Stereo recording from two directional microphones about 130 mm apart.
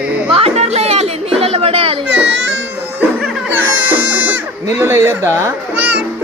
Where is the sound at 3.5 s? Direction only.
15° right (ahead or behind).